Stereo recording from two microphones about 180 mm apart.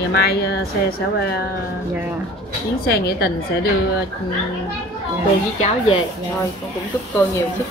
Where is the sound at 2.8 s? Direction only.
60° left (ahead or behind).